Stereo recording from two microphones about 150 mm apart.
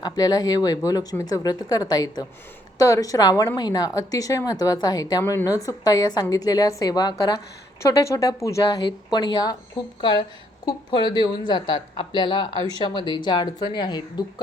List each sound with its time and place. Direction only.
0.0 s a woman's voice: 25° left (ahead or behind)